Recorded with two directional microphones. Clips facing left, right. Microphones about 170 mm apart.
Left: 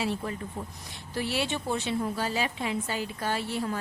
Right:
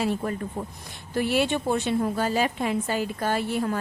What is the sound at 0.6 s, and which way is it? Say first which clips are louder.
Speech: right 5 dB; 40° right (ahead or behind).